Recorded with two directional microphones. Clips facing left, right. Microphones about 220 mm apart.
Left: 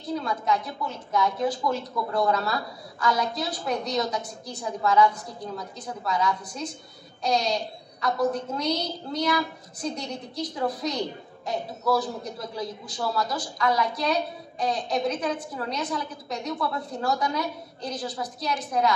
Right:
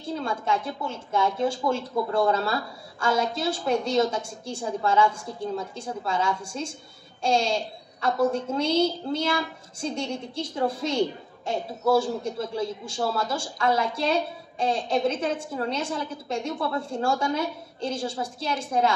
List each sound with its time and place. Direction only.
0.0 s a woman's voice: 25° right (ahead or behind)